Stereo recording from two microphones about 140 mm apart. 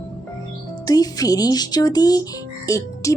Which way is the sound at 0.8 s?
25° left (ahead or behind).